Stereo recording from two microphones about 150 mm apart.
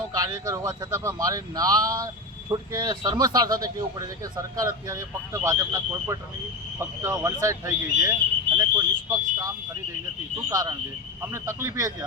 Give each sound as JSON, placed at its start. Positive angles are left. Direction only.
{"t": 0.1, "sound": "speech", "side_deg": -25}